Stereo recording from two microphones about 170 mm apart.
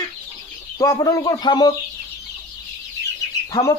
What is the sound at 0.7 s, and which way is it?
Speech, 20° left (ahead or behind).